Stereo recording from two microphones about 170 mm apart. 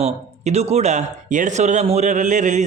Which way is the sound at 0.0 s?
40° right (ahead or behind).